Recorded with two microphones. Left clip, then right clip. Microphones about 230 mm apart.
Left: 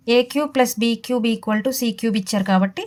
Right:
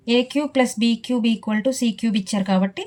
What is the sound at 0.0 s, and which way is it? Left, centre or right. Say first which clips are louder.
Speech: left 3 dB; left.